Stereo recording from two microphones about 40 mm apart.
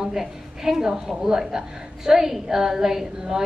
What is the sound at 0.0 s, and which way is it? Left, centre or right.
A woman's voice, centre.